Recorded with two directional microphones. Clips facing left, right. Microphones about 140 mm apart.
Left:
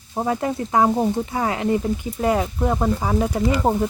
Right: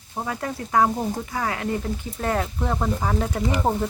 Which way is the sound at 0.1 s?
25° left (ahead or behind).